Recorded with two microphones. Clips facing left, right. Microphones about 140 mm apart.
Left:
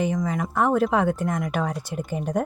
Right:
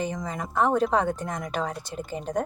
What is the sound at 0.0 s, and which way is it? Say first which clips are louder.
Speech: left 6 dB; 10° left (ahead or behind).